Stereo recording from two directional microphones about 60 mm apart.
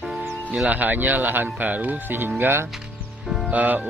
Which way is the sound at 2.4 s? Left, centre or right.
Right.